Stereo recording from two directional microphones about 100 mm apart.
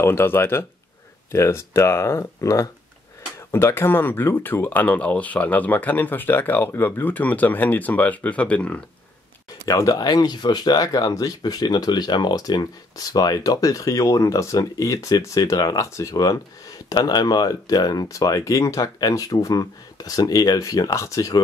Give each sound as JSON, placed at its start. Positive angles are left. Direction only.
{"t": 0.0, "sound": "speech", "side_deg": 25}
{"t": 9.7, "sound": "speech", "side_deg": 35}